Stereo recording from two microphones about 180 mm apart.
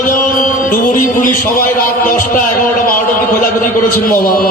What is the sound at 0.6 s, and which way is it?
Music, 50° left (ahead or behind).